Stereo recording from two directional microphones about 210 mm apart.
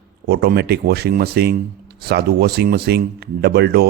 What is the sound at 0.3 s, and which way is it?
Speech, 50° right (ahead or behind).